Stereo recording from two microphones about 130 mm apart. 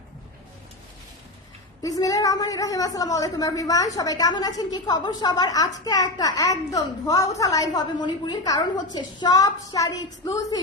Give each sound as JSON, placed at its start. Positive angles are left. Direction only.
{"t": 1.8, "sound": "a woman's voice", "side_deg": 25}